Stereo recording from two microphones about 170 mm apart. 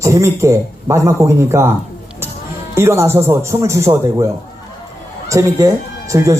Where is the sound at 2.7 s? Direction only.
15° right (ahead or behind).